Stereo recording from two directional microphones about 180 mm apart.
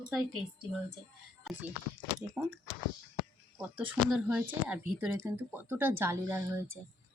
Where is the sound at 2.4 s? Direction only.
5° right (ahead or behind).